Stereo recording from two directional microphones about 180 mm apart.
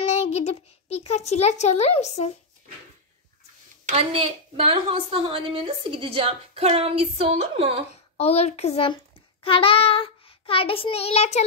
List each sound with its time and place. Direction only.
0.0 s a child's voice: 40° left (ahead or behind)
3.8 s a woman's voice: 35° right (ahead or behind)
7.9 s a child's voice: 35° left (ahead or behind)